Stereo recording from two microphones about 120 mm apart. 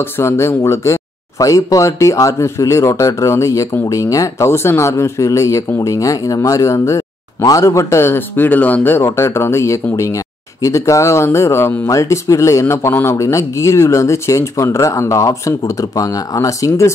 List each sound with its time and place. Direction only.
0.2 s speech: 20° left (ahead or behind)